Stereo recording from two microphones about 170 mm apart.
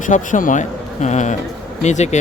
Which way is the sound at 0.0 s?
50° left (ahead or behind).